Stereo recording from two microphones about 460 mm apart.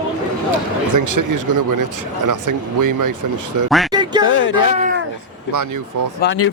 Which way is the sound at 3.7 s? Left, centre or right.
Centre.